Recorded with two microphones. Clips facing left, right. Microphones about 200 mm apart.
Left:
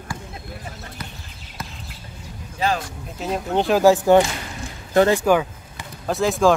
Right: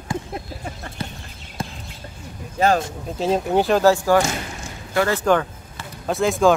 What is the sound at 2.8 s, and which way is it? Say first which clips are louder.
Speech: right 6 dB; 25° right (ahead or behind).